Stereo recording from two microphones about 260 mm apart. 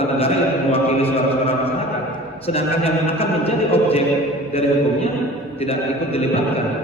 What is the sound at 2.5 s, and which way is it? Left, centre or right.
A man's voice, left.